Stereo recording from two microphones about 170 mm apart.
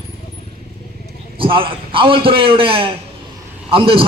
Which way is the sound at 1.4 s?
30° right (ahead or behind).